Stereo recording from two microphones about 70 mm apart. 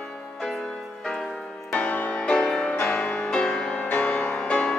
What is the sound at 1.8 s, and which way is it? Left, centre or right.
Music, left.